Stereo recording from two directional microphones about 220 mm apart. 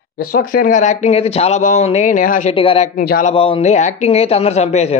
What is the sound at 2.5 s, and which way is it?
Speech, 25° left (ahead or behind).